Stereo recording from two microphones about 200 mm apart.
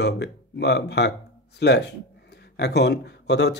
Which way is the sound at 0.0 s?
55° left (ahead or behind).